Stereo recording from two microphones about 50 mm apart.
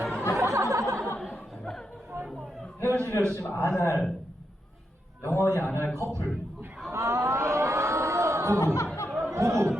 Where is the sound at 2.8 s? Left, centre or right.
Right.